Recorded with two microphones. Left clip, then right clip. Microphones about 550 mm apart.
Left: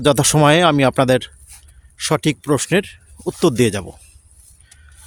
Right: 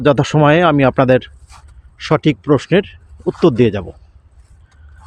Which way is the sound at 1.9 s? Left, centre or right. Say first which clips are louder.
Right 3 dB; left.